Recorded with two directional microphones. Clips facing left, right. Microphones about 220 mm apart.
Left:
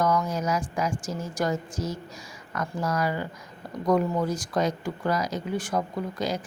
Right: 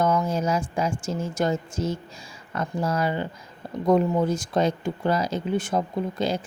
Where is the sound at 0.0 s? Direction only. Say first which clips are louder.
Right 2 dB; 25° right (ahead or behind).